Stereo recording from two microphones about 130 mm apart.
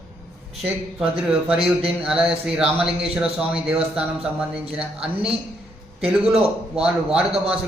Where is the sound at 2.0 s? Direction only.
5° right (ahead or behind).